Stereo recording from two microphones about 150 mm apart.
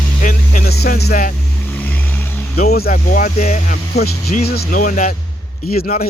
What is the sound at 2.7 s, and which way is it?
Speech, 75° left (ahead or behind).